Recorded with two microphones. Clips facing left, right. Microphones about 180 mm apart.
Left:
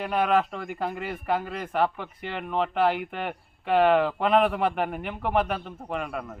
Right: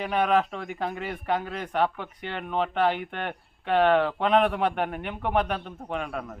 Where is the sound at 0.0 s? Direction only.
Centre (ahead or behind).